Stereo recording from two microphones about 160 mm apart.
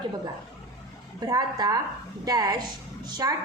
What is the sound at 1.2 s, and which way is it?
A woman's voice, 25° right (ahead or behind).